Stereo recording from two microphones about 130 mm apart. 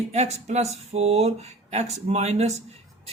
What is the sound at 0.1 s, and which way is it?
Speech, 60° right (ahead or behind).